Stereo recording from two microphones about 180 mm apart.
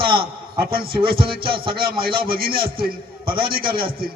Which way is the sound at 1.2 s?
30° right (ahead or behind).